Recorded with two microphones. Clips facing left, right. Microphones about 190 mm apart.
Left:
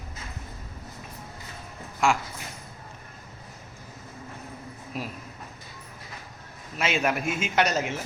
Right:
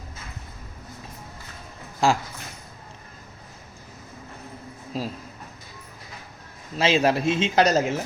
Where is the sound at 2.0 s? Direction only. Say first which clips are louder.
Right 3 dB; 35° right (ahead or behind).